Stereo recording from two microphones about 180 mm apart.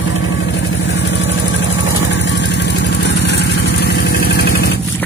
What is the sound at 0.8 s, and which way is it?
Vehicle, 85° left.